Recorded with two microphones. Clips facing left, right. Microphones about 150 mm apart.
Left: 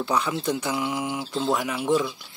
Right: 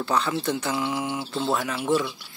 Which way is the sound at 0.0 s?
15° left (ahead or behind).